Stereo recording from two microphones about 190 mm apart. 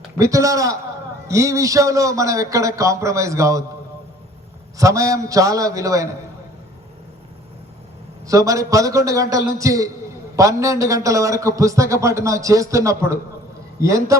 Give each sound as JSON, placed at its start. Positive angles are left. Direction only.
{"t": 0.2, "sound": "a man's voice", "side_deg": -15}
{"t": 4.8, "sound": "a man's voice", "side_deg": -15}
{"t": 8.3, "sound": "a man's voice", "side_deg": -15}